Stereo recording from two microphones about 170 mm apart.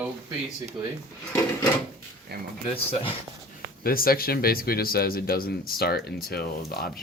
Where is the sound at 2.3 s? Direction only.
70° right (ahead or behind).